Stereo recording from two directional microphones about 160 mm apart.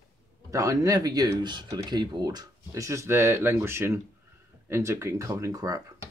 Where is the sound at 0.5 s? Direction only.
20° right (ahead or behind).